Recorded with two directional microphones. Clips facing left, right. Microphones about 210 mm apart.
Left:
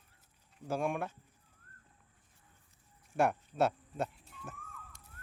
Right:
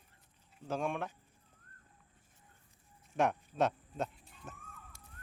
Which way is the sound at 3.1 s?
10° left (ahead or behind).